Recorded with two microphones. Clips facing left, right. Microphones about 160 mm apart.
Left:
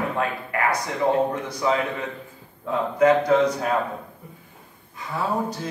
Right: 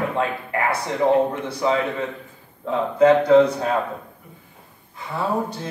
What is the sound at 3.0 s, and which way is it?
Speech, 30° right (ahead or behind).